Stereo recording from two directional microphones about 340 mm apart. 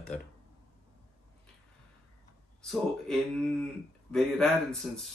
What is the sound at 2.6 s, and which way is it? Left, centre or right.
Speech, centre.